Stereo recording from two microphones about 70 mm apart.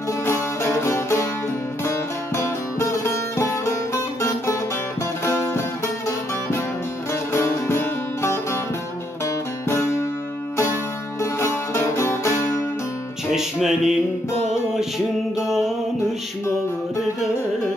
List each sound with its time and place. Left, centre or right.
0.2 s music: left
7.3 s music: left
11.1 s music: left
13.3 s music: centre